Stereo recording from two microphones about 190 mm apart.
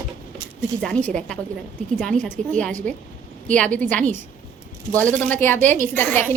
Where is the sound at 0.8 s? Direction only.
5° left (ahead or behind).